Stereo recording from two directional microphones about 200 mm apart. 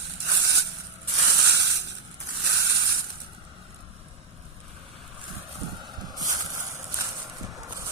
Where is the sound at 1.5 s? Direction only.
60° right (ahead or behind).